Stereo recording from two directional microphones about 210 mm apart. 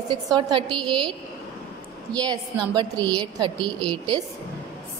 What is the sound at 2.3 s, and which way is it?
A woman's voice, 20° right (ahead or behind).